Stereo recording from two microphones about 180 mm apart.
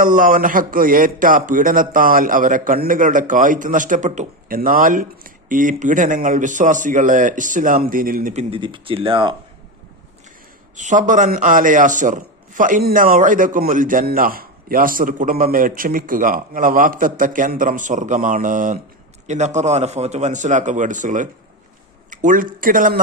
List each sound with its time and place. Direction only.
0.0 s a man's voice: 50° right (ahead or behind); by 9.3 s 30° right (ahead or behind)
10.8 s a man's voice: 45° right (ahead or behind)